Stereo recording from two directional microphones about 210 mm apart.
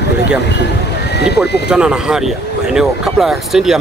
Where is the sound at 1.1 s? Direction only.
50° left (ahead or behind).